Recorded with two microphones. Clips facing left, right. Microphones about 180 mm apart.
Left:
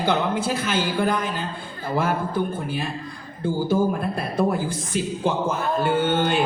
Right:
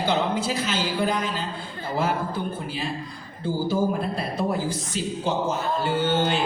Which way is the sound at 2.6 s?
55° left (ahead or behind).